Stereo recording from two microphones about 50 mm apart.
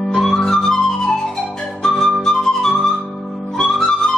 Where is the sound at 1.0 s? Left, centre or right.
Centre.